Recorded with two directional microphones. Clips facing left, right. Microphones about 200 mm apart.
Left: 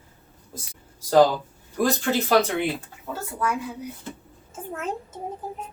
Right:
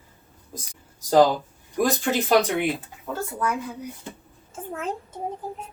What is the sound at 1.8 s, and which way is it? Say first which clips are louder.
Speech: even; 15° right (ahead or behind).